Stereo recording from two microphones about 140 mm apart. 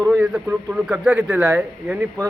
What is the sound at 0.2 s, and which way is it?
Speech, 5° right (ahead or behind).